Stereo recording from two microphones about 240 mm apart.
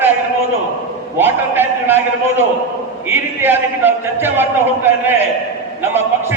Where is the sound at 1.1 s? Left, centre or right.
Centre.